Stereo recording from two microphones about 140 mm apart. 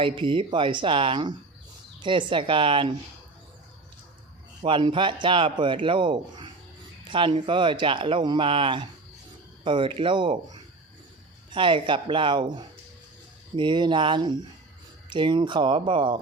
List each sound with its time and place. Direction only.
0.0 s a man's voice: 40° right (ahead or behind)
4.6 s a man's voice: 35° right (ahead or behind)